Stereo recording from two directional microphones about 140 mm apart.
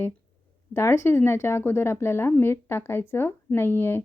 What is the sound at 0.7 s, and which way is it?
Speech, 20° left (ahead or behind).